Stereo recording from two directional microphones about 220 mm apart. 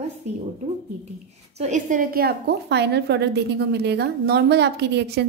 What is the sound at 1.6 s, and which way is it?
A woman's voice, 35° right (ahead or behind).